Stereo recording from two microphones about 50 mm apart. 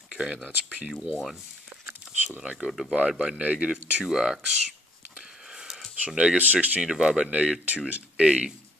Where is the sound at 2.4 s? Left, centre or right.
Centre.